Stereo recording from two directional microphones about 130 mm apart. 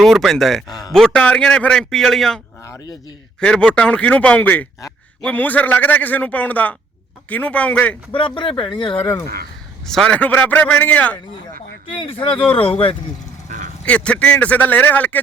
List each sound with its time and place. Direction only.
0.0 s speech: centre (ahead or behind)
0.7 s speech: 30° left (ahead or behind)
0.9 s speech: 5° left (ahead or behind)
2.6 s speech: 25° left (ahead or behind)
3.4 s a man's voice: 10° left (ahead or behind)
8.1 s speech: 40° left (ahead or behind)
9.8 s a man's voice: 5° left (ahead or behind)
11.9 s speech: 45° left (ahead or behind)
13.8 s a man's voice: 10° left (ahead or behind)